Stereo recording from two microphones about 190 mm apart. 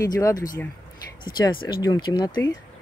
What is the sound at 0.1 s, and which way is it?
Speech, 20° left (ahead or behind).